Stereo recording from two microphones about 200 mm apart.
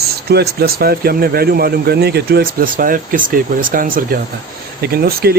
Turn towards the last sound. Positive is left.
turn(degrees=-50)  # may be behind; listen again after turning